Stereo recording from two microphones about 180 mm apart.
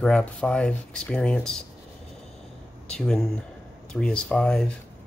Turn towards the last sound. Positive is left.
turn(degrees=5)  # may be behind; listen again after turning